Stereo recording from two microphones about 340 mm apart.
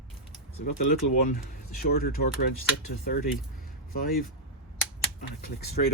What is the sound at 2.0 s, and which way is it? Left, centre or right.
Speech, left.